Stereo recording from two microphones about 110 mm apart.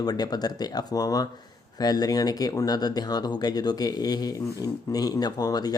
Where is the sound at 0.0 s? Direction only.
40° left (ahead or behind).